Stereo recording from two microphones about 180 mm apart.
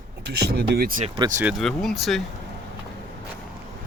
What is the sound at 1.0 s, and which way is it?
Speech, 30° right (ahead or behind).